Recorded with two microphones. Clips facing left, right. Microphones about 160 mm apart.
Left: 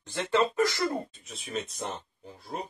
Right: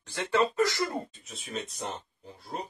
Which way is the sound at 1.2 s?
Centre (ahead or behind).